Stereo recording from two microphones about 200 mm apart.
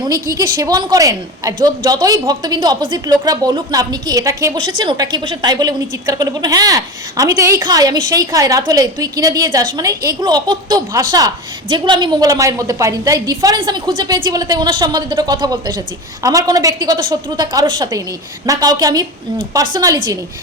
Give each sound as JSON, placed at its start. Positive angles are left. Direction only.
{"t": 0.0, "sound": "speech", "side_deg": -15}